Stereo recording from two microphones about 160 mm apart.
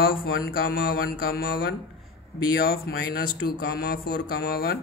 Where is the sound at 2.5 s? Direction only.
70° left (ahead or behind).